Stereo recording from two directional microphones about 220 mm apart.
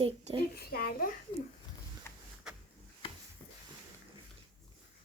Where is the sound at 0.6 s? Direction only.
45° left (ahead or behind).